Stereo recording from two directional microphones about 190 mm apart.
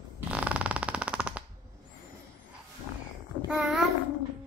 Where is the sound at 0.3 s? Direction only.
5° right (ahead or behind).